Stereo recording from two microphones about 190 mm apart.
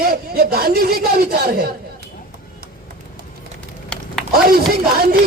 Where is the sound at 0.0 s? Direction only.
55° right (ahead or behind).